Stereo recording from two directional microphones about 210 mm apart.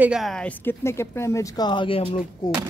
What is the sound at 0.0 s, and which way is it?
A woman's voice, centre (ahead or behind).